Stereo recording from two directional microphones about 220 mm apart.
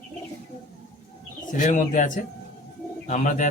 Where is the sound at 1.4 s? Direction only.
35° left (ahead or behind).